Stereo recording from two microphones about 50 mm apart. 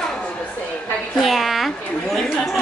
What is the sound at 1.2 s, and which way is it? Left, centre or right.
A woman's voice, centre.